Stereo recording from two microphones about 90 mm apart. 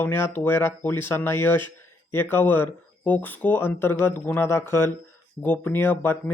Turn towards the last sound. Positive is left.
turn(degrees=25)  # may be behind; listen again after turning